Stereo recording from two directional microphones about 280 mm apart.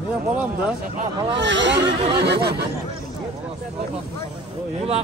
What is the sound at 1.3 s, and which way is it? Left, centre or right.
Speech, right.